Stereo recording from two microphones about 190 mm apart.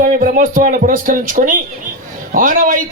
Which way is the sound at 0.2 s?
45° right (ahead or behind).